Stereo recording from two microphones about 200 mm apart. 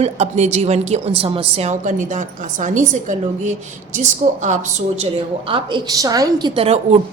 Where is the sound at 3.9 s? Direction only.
40° right (ahead or behind).